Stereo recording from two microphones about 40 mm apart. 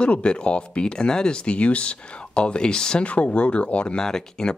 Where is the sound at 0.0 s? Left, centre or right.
Left.